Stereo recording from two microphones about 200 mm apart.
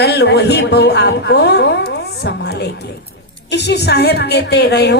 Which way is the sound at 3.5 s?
55° left (ahead or behind).